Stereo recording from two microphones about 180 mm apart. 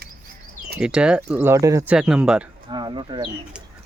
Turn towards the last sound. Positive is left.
turn(degrees=-5)  # may be behind; listen again after turning